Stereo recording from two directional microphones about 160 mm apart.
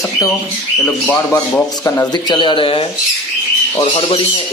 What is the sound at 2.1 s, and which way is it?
Speech, 30° left (ahead or behind).